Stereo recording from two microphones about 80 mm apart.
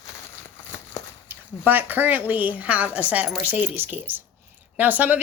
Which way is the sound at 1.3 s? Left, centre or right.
Right.